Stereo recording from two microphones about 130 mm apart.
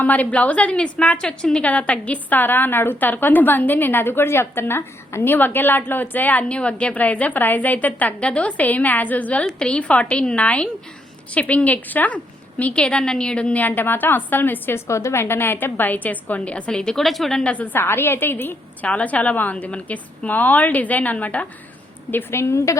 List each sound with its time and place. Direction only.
0.0 s a woman's voice: 10° left (ahead or behind)